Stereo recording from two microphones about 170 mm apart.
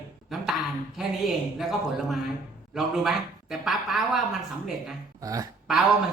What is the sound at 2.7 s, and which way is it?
Speech, centre (ahead or behind).